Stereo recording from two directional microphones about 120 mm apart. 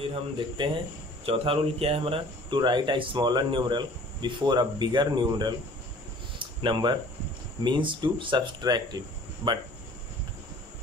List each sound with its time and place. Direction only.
0.0 s speech: 50° right (ahead or behind)